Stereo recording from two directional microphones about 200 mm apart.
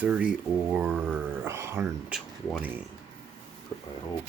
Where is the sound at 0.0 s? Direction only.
5° right (ahead or behind).